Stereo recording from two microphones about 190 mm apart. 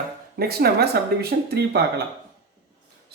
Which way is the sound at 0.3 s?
55° right (ahead or behind).